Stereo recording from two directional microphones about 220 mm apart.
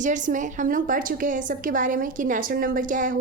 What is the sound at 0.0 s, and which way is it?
A woman's voice, 35° right (ahead or behind).